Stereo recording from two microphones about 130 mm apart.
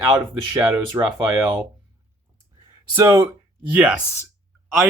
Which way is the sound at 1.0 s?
25° right (ahead or behind).